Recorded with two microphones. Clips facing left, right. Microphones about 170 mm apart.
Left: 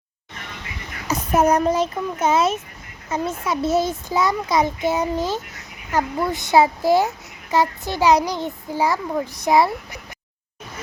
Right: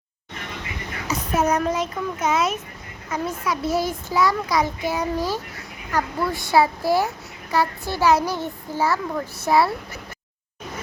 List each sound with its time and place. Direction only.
1.4 s a child's voice: 35° left (ahead or behind); by 10.0 s 15° left (ahead or behind)